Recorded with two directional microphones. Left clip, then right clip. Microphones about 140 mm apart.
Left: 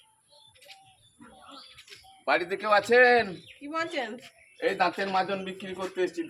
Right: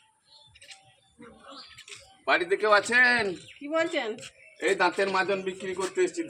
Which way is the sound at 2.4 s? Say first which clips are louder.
Right 2 dB; 20° left (ahead or behind).